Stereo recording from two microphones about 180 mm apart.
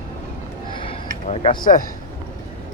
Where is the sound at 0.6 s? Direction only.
30° left (ahead or behind).